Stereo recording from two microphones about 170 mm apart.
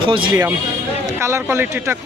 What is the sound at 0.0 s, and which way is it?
Speech, 30° right (ahead or behind).